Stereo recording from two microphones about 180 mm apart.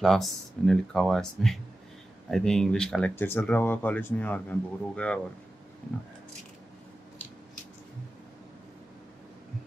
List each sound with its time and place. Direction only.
0.0 s speech: centre (ahead or behind)